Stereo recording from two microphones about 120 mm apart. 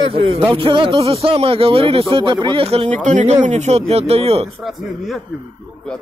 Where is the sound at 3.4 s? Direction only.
70° right (ahead or behind).